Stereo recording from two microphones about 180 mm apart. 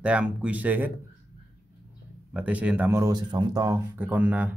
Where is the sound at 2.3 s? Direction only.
5° right (ahead or behind).